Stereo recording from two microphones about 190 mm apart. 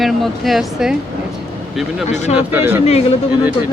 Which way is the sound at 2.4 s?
10° right (ahead or behind).